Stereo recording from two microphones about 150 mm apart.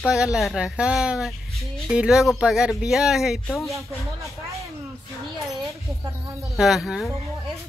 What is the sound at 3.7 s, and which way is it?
Speech, 20° right (ahead or behind).